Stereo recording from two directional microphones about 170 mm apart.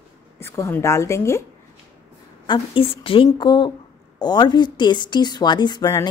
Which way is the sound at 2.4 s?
30° left (ahead or behind).